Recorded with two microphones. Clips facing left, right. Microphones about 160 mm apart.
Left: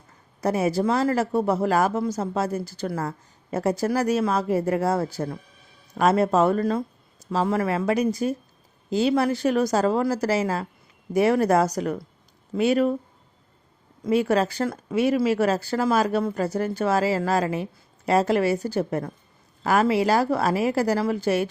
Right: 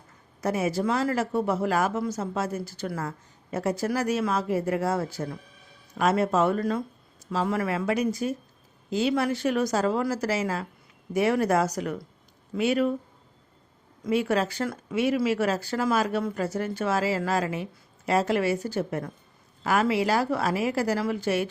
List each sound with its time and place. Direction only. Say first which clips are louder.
0.4 s speech: left 4 dB; 35° left (ahead or behind)
14.0 s speech: left 4 dB; 40° left (ahead or behind)